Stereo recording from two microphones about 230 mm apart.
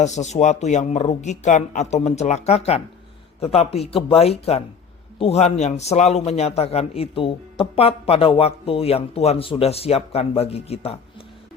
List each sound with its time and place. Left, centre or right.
0.0 s a man's voice: left